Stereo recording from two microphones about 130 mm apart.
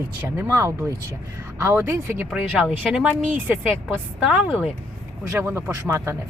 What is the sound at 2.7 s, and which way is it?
Speech, 5° right (ahead or behind).